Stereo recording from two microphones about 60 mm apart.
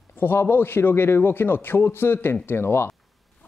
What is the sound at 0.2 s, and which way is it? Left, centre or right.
Speech, left.